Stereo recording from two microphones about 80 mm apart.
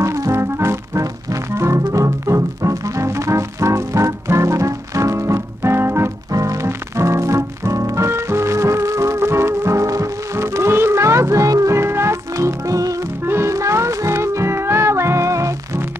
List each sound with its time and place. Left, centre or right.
0.0 s music: right
6.3 s music: right